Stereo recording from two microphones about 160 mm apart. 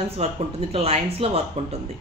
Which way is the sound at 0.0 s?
40° right (ahead or behind).